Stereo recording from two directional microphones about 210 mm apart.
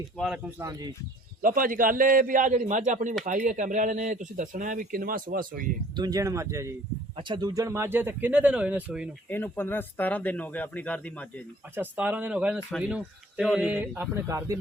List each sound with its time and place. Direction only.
0.6 s speech: 15° right (ahead or behind)
1.4 s a man's voice: 40° right (ahead or behind)
6.0 s speech: 15° right (ahead or behind)
9.3 s speech: 10° left (ahead or behind)
11.7 s speech: 10° right (ahead or behind)